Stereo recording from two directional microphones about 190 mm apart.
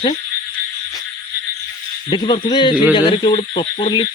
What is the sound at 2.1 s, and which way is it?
Speech, 25° left (ahead or behind).